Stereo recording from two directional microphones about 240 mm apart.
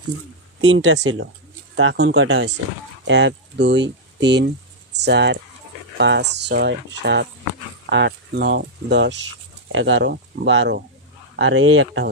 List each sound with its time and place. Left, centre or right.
0.6 s speech: right